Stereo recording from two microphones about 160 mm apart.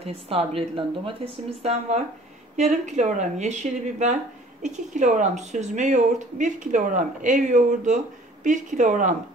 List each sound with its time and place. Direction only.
0.0 s speech: 40° right (ahead or behind)